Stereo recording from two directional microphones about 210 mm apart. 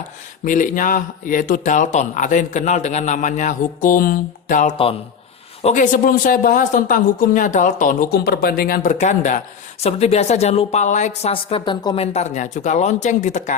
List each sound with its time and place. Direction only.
0.4 s a woman's voice: 35° left (ahead or behind); by 12.0 s 20° left (ahead or behind)
12.1 s speech: 35° left (ahead or behind)